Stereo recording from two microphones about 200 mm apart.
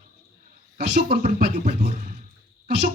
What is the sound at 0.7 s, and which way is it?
Speech, 55° right (ahead or behind).